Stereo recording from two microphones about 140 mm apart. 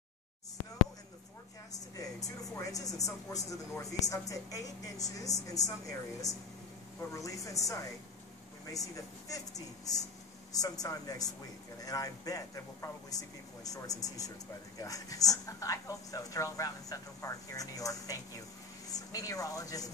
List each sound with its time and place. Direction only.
1.7 s speech: 25° left (ahead or behind)